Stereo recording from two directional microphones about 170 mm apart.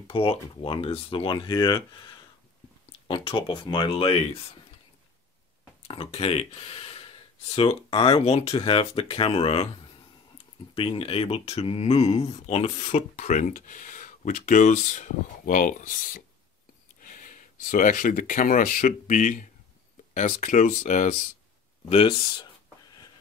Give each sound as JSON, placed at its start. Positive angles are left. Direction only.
{"t": 0.1, "sound": "speech", "side_deg": 35}
{"t": 3.1, "sound": "speech", "side_deg": 30}
{"t": 5.9, "sound": "speech", "side_deg": 35}
{"t": 10.7, "sound": "speech", "side_deg": 35}
{"t": 21.8, "sound": "speech", "side_deg": 30}